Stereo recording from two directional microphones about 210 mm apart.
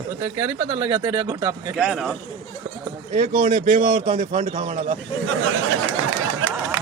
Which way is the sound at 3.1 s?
40° right (ahead or behind).